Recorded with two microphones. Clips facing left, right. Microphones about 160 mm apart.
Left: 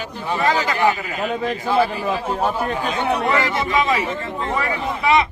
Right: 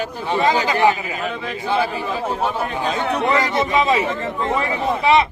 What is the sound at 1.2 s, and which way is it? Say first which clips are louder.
Speech: left 3 dB; 45° left (ahead or behind).